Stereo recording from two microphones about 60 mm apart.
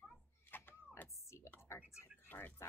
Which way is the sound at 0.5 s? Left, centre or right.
Left.